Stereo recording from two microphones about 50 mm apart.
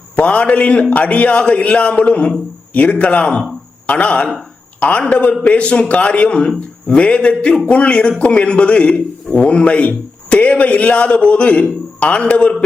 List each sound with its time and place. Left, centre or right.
0.2 s a man's voice: left